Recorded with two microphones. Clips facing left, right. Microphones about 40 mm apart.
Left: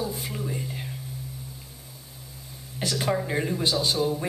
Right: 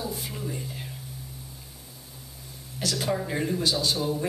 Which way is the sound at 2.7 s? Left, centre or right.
Left.